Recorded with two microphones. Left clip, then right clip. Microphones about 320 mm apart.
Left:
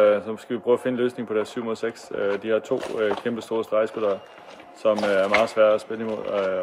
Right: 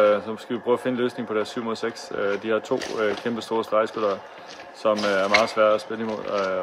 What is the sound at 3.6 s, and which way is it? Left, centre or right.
Speech, centre.